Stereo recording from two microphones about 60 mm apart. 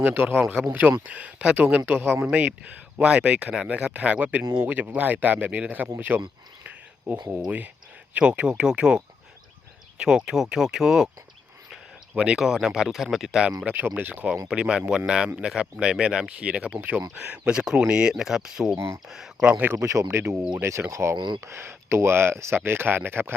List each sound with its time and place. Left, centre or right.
0.0 s speech: right
10.0 s speech: centre
12.1 s speech: centre
13.7 s speech: right
14.4 s speech: centre
19.5 s speech: right
19.8 s speech: right